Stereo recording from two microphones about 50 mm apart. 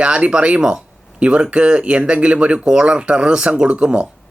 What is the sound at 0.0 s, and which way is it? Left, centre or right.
Speech, right.